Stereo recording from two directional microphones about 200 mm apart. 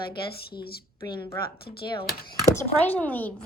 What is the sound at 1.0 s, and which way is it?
Speech, 15° left (ahead or behind).